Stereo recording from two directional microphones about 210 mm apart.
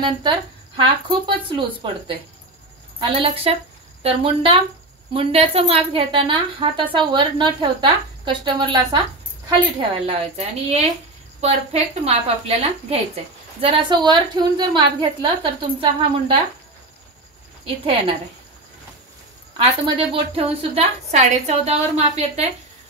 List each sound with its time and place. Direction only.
0.0 s a woman's voice: 25° right (ahead or behind)
20.1 s a woman's voice: 25° right (ahead or behind)